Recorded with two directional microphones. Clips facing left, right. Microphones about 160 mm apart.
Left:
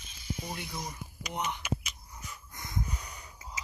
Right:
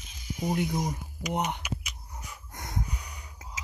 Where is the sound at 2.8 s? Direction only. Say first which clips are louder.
Even; 15° right (ahead or behind).